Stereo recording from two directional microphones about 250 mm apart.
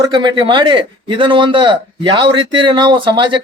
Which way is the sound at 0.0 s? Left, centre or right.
Centre.